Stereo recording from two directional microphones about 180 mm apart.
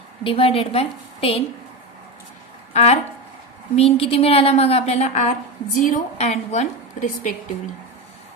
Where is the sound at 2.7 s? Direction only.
40° left (ahead or behind).